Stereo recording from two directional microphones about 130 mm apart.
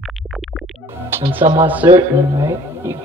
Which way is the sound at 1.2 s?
15° right (ahead or behind).